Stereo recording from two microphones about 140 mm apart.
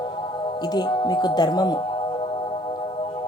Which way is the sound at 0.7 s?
30° left (ahead or behind).